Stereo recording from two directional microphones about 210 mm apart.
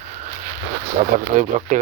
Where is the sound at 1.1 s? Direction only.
35° right (ahead or behind).